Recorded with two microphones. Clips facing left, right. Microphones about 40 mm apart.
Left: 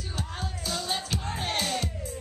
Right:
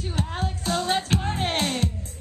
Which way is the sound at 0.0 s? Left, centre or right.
Right.